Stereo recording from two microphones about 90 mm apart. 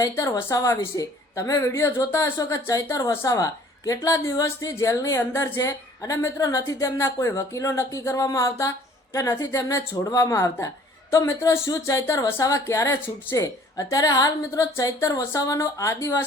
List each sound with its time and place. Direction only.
0.0 s speech: 40° left (ahead or behind)